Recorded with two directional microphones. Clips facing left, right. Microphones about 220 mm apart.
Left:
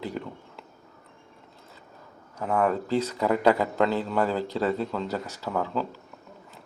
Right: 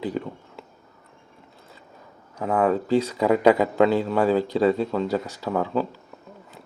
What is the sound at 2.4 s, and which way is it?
A man's voice, 15° right (ahead or behind).